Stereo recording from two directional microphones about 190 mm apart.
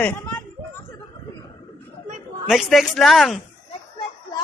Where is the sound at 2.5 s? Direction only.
Centre (ahead or behind).